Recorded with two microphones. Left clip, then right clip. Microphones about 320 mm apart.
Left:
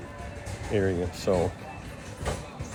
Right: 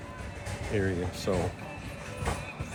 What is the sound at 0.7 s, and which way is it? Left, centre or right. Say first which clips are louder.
Speech: left 4 dB; centre.